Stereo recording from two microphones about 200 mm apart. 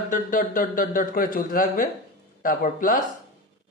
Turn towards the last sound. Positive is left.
turn(degrees=45)  # may be behind; listen again after turning